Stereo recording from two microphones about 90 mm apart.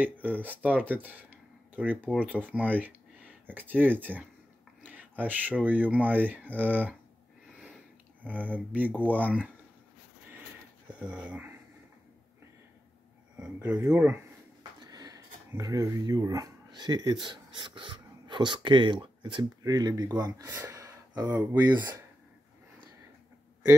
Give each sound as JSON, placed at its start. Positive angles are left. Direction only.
{"t": 0.0, "sound": "speech", "side_deg": -20}
{"t": 8.2, "sound": "speech", "side_deg": -20}
{"t": 10.9, "sound": "speech", "side_deg": -15}
{"t": 13.4, "sound": "speech", "side_deg": -15}
{"t": 14.8, "sound": "speech", "side_deg": -45}
{"t": 19.6, "sound": "speech", "side_deg": -45}
{"t": 20.6, "sound": "a sound", "side_deg": -40}
{"t": 21.3, "sound": "speech", "side_deg": -20}